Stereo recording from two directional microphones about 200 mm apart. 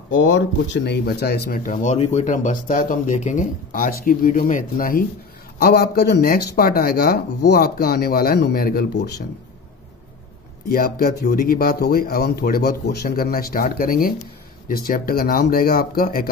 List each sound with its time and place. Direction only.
0.1 s speech: 75° left (ahead or behind); by 9.2 s 55° left (ahead or behind)
10.7 s speech: 45° left (ahead or behind)